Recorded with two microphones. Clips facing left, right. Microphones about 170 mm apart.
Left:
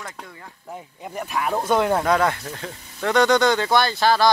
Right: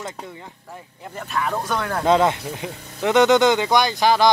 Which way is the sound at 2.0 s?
20° right (ahead or behind).